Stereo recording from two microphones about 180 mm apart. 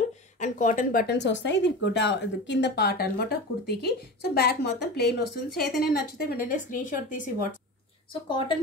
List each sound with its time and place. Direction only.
0.4 s speech: 45° left (ahead or behind)
8.1 s a woman's voice: 25° left (ahead or behind)